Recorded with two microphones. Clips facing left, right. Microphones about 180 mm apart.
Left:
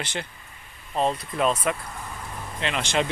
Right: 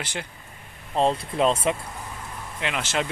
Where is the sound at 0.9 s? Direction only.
30° right (ahead or behind).